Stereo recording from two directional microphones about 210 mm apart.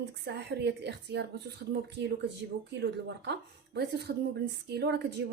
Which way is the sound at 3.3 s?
55° right (ahead or behind).